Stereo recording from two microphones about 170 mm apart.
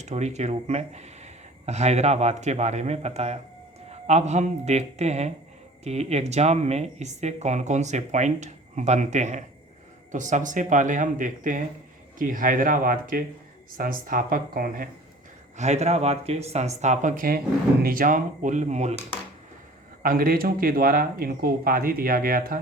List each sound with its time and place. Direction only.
0.0 s speech: 40° right (ahead or behind); by 14.8 s 60° right (ahead or behind)
15.5 s speech: 40° right (ahead or behind)
20.0 s speech: 60° right (ahead or behind)